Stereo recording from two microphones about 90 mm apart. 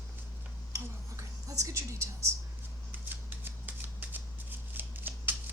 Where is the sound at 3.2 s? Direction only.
20° right (ahead or behind).